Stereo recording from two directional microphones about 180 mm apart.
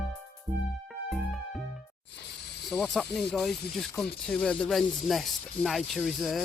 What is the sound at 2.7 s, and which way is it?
Speech, centre (ahead or behind).